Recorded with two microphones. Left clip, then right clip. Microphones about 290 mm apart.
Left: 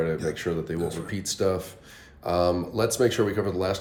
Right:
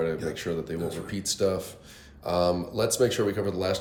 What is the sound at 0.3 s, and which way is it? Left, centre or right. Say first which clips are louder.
Speech: left 2 dB; left.